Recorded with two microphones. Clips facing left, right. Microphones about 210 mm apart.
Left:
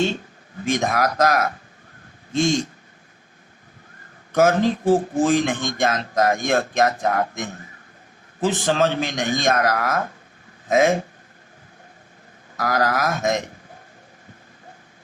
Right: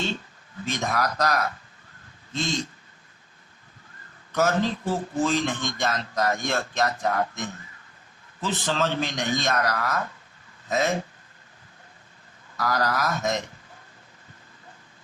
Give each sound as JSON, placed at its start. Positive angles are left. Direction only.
{"t": 0.6, "sound": "a man's voice", "side_deg": 50}
{"t": 4.3, "sound": "a man's voice", "side_deg": 45}
{"t": 12.5, "sound": "a man's voice", "side_deg": 45}